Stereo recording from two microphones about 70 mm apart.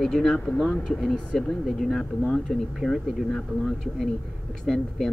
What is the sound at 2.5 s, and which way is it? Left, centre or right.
Speech, centre.